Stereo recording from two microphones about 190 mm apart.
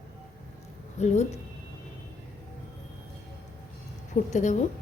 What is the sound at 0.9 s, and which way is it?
Speech, 35° left (ahead or behind).